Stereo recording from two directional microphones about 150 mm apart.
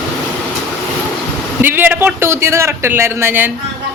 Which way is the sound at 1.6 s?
15° right (ahead or behind).